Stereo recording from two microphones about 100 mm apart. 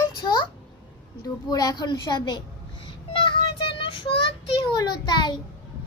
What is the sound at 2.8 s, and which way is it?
Child singing, 55° left (ahead or behind).